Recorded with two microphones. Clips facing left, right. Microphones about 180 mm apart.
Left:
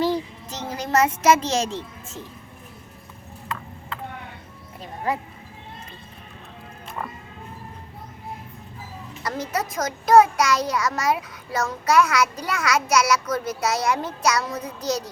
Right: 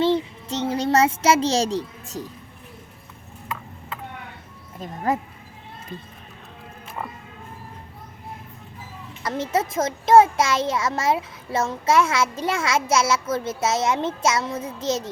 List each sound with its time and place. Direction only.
0.0 s a child's voice: 30° right (ahead or behind)
5.1 s speech: 45° right (ahead or behind)
9.2 s a child's voice: 25° right (ahead or behind)